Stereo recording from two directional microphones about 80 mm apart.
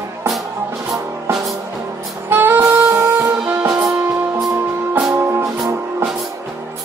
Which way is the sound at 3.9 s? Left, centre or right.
Right.